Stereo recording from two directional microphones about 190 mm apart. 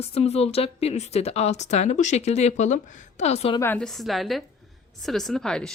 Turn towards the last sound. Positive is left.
turn(degrees=5)  # may be behind; listen again after turning